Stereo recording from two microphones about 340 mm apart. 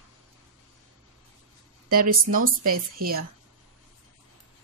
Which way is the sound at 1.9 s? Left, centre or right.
Right.